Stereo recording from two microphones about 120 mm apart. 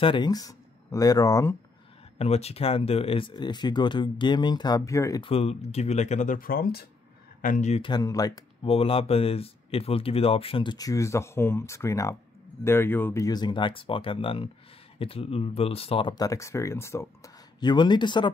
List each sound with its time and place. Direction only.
0.0 s speech: 40° left (ahead or behind)
2.1 s speech: 60° left (ahead or behind); by 5.2 s 25° left (ahead or behind)
5.2 s speech: 60° left (ahead or behind); by 6.3 s 80° left
7.4 s speech: 80° left
7.8 s speech: 35° left (ahead or behind)
8.6 s speech: 55° left (ahead or behind); by 13.2 s 15° left (ahead or behind)
13.2 s speech: 35° left (ahead or behind); by 16.1 s 55° left (ahead or behind)
16.1 s speech: 30° left (ahead or behind)
17.6 s speech: 40° left (ahead or behind)